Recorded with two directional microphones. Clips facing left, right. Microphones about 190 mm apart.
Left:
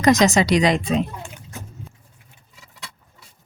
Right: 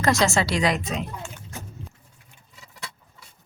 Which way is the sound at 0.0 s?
20° left (ahead or behind).